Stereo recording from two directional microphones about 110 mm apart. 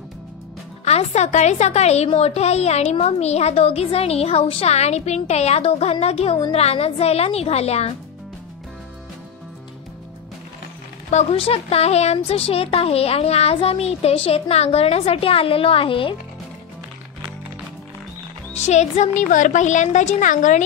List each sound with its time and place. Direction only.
0.8 s a woman's voice: 85° left
11.1 s a woman's voice: 75° left (ahead or behind); by 16.2 s 50° left (ahead or behind)
18.5 s a woman's voice: 90° left